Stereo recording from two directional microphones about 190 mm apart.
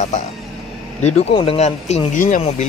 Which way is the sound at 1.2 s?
30° left (ahead or behind).